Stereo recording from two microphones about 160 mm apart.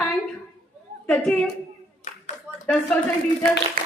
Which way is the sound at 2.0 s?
50° left (ahead or behind).